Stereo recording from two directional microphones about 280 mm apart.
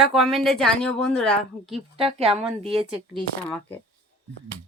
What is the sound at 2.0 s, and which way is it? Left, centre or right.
Speech, right.